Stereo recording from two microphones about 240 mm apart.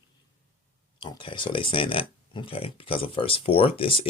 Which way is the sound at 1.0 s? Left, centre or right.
Centre.